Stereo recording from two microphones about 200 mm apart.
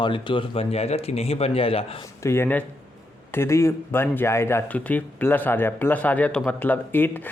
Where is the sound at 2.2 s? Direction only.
10° left (ahead or behind).